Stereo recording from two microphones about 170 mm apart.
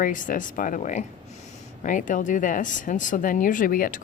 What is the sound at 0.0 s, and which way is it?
Speech, 50° left (ahead or behind).